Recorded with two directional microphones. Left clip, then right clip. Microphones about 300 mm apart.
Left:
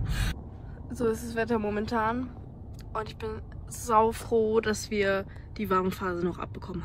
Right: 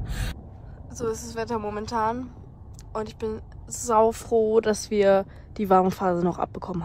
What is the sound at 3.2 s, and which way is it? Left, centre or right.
A woman's voice, centre.